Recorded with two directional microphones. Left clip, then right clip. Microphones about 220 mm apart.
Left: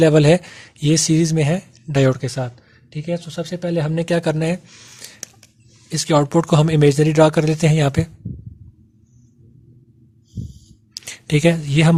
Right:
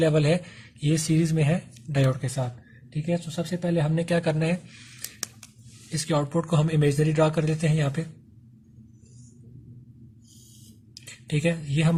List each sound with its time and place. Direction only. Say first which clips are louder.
0.0 s speech: left 10 dB; 45° left (ahead or behind)
11.0 s speech: left 10 dB; 45° left (ahead or behind)